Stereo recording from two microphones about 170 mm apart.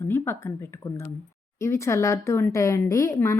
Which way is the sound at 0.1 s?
15° left (ahead or behind).